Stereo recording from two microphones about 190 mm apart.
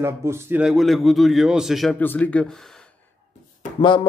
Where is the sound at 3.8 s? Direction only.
25° left (ahead or behind).